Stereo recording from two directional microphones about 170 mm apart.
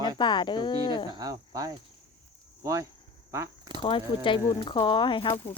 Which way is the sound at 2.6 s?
20° right (ahead or behind).